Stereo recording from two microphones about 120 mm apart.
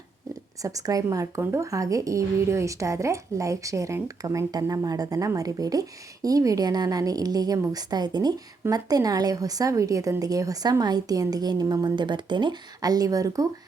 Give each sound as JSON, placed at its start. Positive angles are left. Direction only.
{"t": 0.6, "sound": "speech", "side_deg": -30}